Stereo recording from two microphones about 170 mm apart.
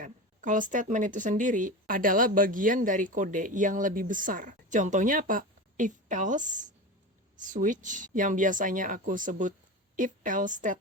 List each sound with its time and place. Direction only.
0.0 s a woman's voice: 50° right (ahead or behind)